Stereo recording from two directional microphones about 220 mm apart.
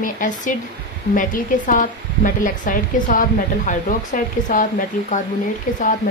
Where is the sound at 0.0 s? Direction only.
35° left (ahead or behind).